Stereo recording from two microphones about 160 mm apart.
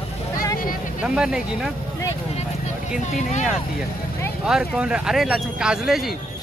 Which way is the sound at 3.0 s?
50° left (ahead or behind).